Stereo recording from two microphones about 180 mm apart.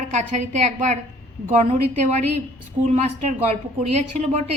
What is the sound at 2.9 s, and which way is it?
Speech, 40° right (ahead or behind).